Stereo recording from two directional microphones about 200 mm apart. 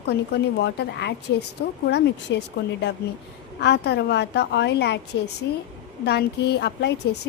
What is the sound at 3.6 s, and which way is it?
A woman's voice, 55° left (ahead or behind).